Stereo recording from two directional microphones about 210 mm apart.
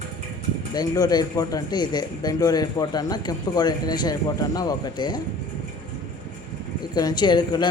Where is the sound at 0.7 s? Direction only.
20° left (ahead or behind).